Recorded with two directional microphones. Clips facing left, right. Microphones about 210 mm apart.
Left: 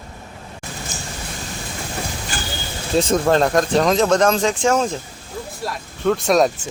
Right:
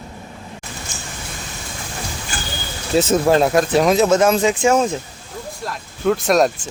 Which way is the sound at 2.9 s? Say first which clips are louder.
Right 2 dB; 5° right (ahead or behind).